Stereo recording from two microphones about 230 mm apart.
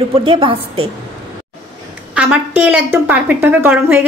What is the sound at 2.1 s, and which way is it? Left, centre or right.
A woman's voice, centre.